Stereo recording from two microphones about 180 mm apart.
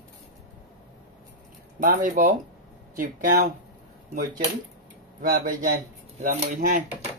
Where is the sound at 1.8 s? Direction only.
45° right (ahead or behind).